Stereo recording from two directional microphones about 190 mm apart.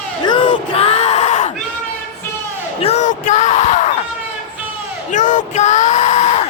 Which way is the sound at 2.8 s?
35° left (ahead or behind).